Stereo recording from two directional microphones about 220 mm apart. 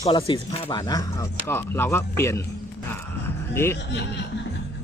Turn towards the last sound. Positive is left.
turn(degrees=10)  # may be behind; listen again after turning